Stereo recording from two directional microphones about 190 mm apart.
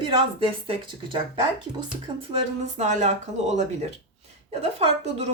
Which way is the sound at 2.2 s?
30° right (ahead or behind).